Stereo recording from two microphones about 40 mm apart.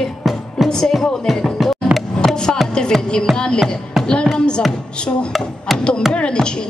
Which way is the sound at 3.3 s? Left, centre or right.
Centre.